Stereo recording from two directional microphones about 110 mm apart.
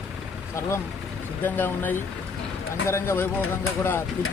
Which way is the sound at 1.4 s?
20° left (ahead or behind).